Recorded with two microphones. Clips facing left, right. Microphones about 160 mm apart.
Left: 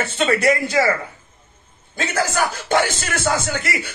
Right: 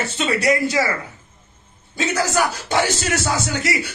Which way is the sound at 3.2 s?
45° left (ahead or behind).